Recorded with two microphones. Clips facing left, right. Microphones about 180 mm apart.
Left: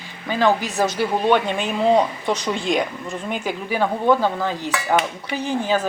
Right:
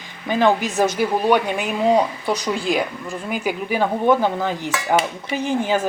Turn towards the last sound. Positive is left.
turn(degrees=-15)  # may be behind; listen again after turning